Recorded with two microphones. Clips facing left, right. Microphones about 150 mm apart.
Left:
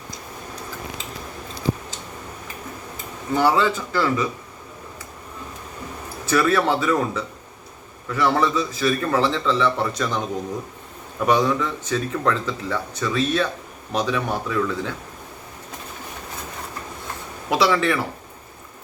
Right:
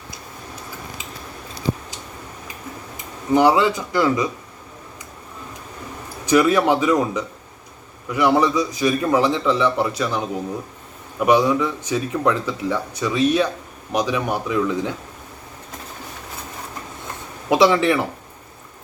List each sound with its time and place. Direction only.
3.3 s speech: 15° right (ahead or behind)
6.2 s speech: 15° right (ahead or behind)
11.3 s speech: 10° right (ahead or behind)
17.5 s speech: 20° right (ahead or behind)